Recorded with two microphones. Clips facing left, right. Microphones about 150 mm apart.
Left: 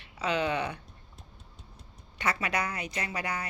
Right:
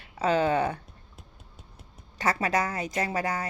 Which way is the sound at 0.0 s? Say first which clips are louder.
Right 5 dB; 45° right (ahead or behind).